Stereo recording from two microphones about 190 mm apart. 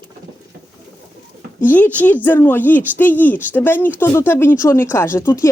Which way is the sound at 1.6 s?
10° left (ahead or behind).